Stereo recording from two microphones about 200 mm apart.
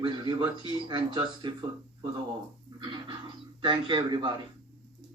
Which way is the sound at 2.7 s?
25° right (ahead or behind).